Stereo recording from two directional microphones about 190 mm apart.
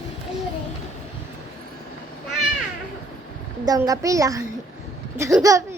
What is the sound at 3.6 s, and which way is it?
Speech, 20° right (ahead or behind).